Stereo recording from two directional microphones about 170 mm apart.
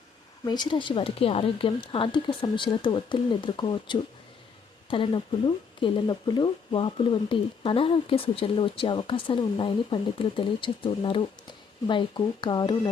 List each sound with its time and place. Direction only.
0.4 s speech: 25° left (ahead or behind)